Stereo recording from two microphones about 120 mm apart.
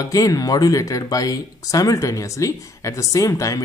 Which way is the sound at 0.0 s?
30° left (ahead or behind).